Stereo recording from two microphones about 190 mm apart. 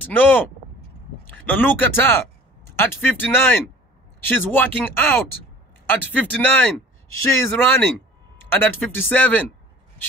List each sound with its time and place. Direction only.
0.0 s speech: 10° left (ahead or behind)